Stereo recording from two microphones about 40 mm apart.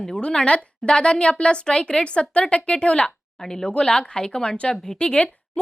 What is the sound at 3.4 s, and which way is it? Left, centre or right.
A woman's voice, centre.